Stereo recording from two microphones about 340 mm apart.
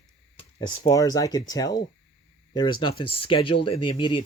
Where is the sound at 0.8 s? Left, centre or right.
Centre.